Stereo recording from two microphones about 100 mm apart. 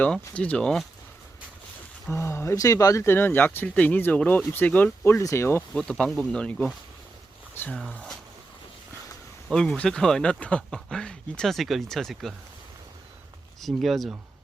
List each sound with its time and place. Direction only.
0.0 s speech: 15° left (ahead or behind)
2.0 s speech: 25° left (ahead or behind)
5.7 s speech: 10° left (ahead or behind)
9.5 s speech: 10° left (ahead or behind)
13.6 s speech: centre (ahead or behind)